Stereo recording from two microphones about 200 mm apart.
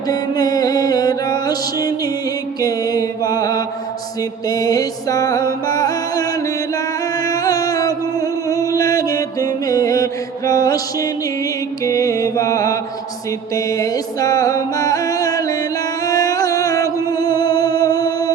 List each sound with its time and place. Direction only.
0.1 s music: 20° left (ahead or behind)
2.6 s mantra: 20° left (ahead or behind)
4.2 s music: 20° left (ahead or behind)